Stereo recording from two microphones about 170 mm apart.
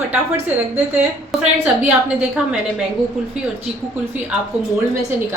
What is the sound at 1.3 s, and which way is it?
Speech, 10° right (ahead or behind).